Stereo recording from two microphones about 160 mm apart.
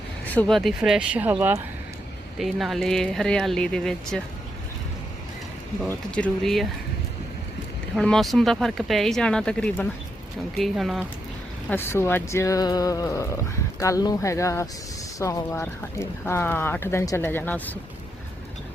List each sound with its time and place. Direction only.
0.3 s speech: 5° left (ahead or behind); by 1.6 s 15° right (ahead or behind)
2.4 s speech: centre (ahead or behind)
5.8 s speech: 5° left (ahead or behind)
7.9 s speech: centre (ahead or behind)
11.7 s speech: 15° left (ahead or behind)